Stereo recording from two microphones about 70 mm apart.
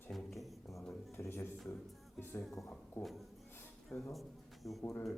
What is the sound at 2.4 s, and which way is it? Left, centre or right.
Speech, centre.